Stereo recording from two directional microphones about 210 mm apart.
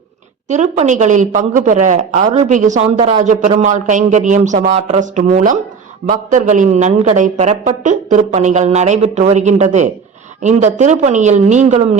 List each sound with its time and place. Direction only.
0.4 s a woman's voice: 35° right (ahead or behind)